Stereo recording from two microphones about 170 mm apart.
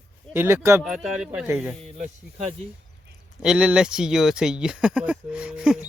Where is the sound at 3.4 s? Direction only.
5° right (ahead or behind).